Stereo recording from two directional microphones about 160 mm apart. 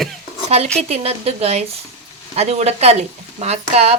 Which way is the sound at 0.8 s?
40° right (ahead or behind).